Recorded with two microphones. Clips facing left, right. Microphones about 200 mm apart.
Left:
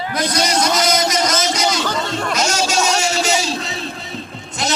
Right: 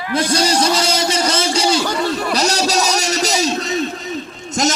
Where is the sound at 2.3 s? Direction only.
35° right (ahead or behind).